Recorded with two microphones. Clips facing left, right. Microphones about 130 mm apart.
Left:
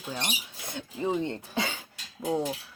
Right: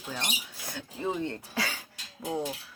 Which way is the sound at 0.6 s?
20° left (ahead or behind).